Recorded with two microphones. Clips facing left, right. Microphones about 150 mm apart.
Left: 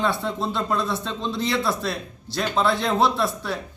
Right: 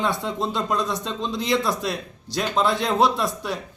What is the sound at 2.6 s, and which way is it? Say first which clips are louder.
Speech: right 1 dB; 15° right (ahead or behind).